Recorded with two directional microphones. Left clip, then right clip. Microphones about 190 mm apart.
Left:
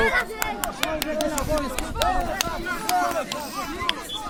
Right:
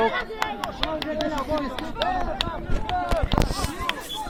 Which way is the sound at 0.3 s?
40° left (ahead or behind).